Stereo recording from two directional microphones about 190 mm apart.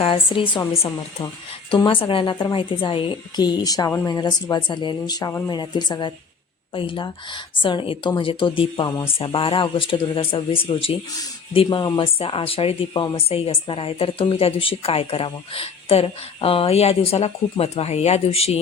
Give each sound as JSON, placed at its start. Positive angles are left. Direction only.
{"t": 0.0, "sound": "a woman's voice", "side_deg": 25}